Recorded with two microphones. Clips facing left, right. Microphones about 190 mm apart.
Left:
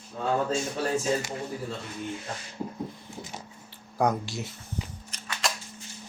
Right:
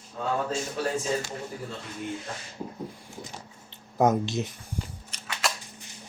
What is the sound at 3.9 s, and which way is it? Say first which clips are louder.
Speech: right 4 dB; 20° right (ahead or behind).